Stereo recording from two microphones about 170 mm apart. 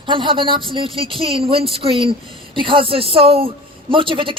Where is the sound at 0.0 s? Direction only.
30° right (ahead or behind).